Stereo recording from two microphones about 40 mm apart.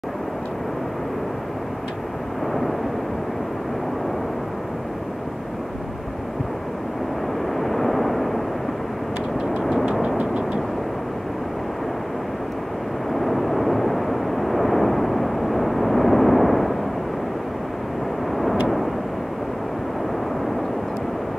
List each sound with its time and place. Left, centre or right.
7.5 s vehicle: centre
10.1 s vehicle: right
13.1 s vehicle: centre